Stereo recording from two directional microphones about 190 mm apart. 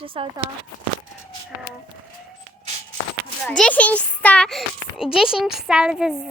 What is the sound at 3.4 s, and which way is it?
A child's voice, 5° left (ahead or behind).